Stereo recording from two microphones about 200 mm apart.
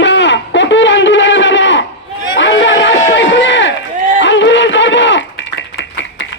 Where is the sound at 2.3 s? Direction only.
65° left (ahead or behind).